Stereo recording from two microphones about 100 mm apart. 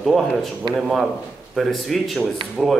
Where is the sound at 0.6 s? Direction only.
45° right (ahead or behind).